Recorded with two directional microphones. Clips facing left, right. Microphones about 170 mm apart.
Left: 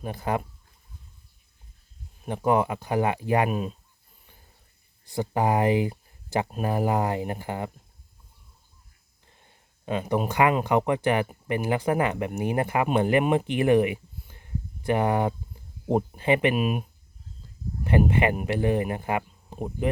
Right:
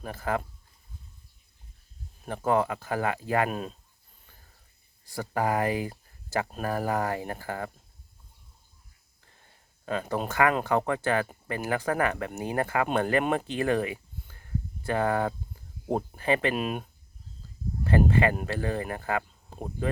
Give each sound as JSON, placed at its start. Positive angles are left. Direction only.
{"t": 0.0, "sound": "speech", "side_deg": 20}
{"t": 2.2, "sound": "speech", "side_deg": 20}
{"t": 5.0, "sound": "speech", "side_deg": 20}
{"t": 9.8, "sound": "speech", "side_deg": 15}
{"t": 16.6, "sound": "speech", "side_deg": 10}
{"t": 17.8, "sound": "speech", "side_deg": 20}